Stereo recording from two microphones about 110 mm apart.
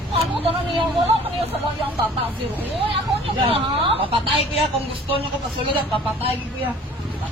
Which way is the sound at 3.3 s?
60° right (ahead or behind).